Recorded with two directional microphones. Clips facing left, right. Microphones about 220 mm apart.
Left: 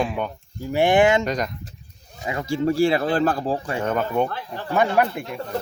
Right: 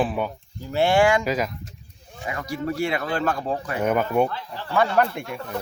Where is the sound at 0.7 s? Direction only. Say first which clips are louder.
Left 2 dB; 15° left (ahead or behind).